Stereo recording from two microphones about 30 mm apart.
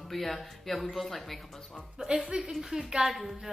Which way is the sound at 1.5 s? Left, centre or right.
Centre.